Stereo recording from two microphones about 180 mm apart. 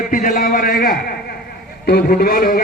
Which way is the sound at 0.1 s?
50° left (ahead or behind).